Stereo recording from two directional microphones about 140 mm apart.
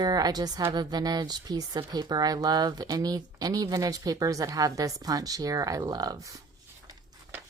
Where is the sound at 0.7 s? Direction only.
30° right (ahead or behind).